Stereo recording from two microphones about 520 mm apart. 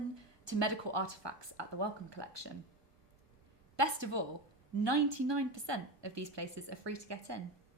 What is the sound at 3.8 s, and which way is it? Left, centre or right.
A woman's voice, right.